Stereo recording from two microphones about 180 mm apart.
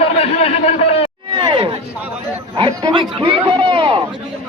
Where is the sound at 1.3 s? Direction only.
25° right (ahead or behind).